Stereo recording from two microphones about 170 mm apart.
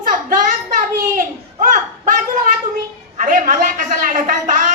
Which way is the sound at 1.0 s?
50° right (ahead or behind).